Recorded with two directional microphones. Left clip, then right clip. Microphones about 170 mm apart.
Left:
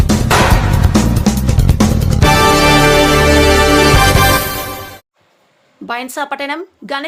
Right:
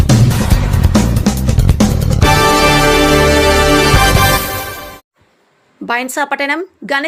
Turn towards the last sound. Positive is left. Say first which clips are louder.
# right 5 dB
turn(degrees=-10)  # may be behind; listen again after turning